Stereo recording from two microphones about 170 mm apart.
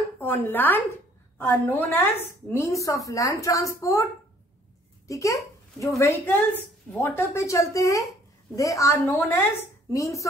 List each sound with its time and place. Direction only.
0.2 s a woman's voice: 10° left (ahead or behind)